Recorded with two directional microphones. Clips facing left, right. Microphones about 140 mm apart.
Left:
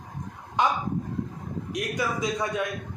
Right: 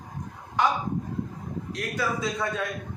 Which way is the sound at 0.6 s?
20° left (ahead or behind).